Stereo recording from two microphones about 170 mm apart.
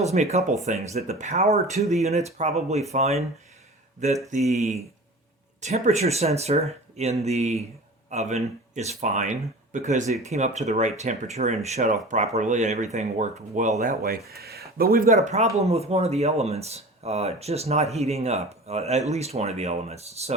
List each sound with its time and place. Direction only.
0.0 s speech: 40° right (ahead or behind)
4.3 s speech: 40° right (ahead or behind)
14.3 s speech: 65° right (ahead or behind); by 20.3 s 40° right (ahead or behind)